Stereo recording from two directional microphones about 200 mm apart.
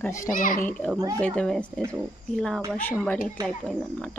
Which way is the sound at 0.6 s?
5° left (ahead or behind).